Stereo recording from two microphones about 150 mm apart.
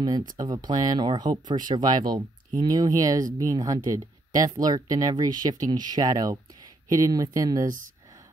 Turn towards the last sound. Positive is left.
turn(degrees=-20)  # may be behind; listen again after turning